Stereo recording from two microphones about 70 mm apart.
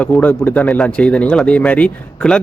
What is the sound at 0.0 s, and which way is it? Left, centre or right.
Speech, left.